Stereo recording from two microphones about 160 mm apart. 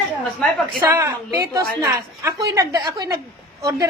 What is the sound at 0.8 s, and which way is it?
A woman's voice, 15° right (ahead or behind).